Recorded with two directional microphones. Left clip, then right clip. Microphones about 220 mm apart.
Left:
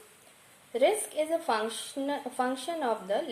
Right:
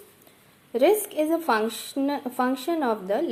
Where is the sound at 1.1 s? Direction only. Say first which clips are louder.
Right 5 dB; 20° right (ahead or behind).